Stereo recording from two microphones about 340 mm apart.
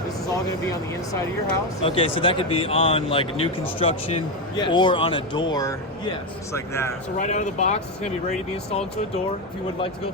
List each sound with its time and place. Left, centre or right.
1.8 s speech: centre
7.2 s speech: left